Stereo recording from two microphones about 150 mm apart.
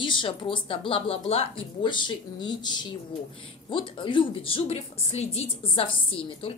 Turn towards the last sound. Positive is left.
turn(degrees=35)  # may be behind; listen again after turning